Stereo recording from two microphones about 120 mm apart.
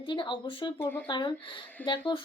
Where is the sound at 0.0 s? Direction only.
45° left (ahead or behind).